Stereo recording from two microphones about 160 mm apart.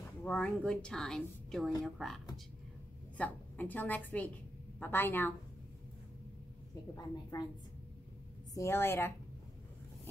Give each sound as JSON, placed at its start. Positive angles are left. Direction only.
{"t": 0.2, "sound": "a woman's voice", "side_deg": 10}
{"t": 3.2, "sound": "a woman's voice", "side_deg": 10}
{"t": 7.0, "sound": "a woman's voice", "side_deg": 25}
{"t": 8.5, "sound": "a woman's voice", "side_deg": 15}